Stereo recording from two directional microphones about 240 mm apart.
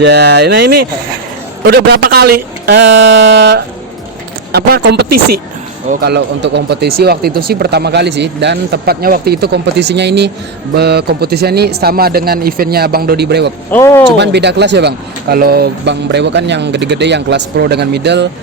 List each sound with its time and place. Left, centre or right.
0.0 s speech: right
4.5 s speech: right
5.0 s speech: right
5.9 s speech: right
13.7 s speech: centre
14.2 s speech: right